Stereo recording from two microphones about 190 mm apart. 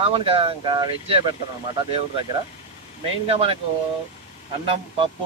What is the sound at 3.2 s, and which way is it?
Speech, 30° right (ahead or behind).